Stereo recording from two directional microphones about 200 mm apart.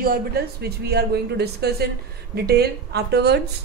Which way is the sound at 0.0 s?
50° right (ahead or behind).